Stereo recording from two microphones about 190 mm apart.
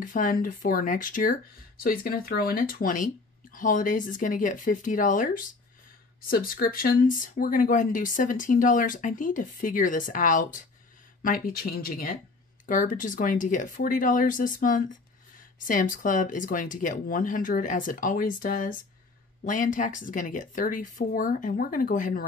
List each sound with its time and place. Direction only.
0.0 s speech: 45° left (ahead or behind)